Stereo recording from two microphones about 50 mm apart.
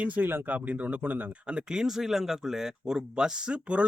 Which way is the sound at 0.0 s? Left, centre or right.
Right.